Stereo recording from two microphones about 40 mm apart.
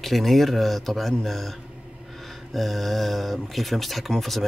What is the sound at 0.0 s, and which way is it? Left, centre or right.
Speech, centre.